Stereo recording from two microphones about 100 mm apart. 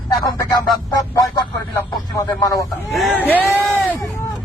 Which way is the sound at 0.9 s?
40° left (ahead or behind).